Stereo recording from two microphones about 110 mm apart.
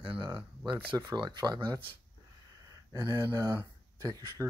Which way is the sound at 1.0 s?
40° right (ahead or behind).